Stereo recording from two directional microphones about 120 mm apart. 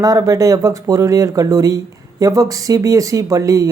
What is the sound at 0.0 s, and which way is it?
Speech, 30° right (ahead or behind).